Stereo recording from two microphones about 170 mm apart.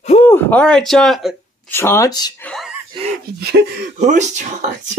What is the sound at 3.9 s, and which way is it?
Speech, 45° right (ahead or behind).